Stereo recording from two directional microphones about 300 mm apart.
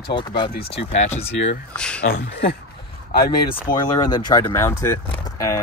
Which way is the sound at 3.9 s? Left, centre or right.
Centre.